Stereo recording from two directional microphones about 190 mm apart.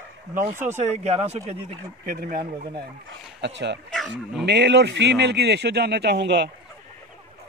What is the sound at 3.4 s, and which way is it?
Speech, 65° right (ahead or behind).